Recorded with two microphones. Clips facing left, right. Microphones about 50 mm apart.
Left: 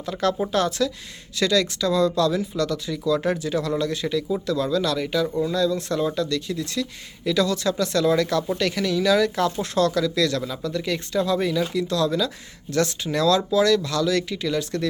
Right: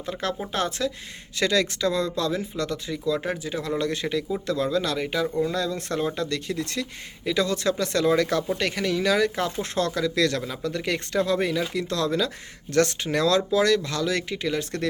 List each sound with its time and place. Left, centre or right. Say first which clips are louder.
0.0 s speech: left 6 dB; right
3.2 s speech: left 5 dB; centre
3.8 s speech: left 2 dB; right